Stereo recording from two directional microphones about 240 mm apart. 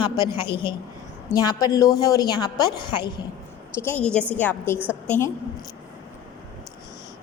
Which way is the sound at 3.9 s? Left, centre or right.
Centre.